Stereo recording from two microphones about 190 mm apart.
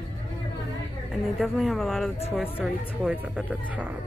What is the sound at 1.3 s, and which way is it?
A woman's voice, centre (ahead or behind).